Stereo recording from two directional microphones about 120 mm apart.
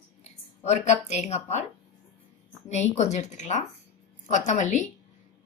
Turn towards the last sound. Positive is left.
turn(degrees=85)